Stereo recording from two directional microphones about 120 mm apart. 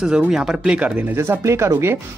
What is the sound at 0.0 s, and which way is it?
Speech, 5° right (ahead or behind).